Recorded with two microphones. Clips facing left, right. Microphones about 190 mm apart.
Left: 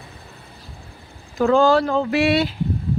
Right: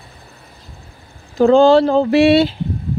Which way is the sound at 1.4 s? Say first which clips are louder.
Right 6 dB; 25° right (ahead or behind).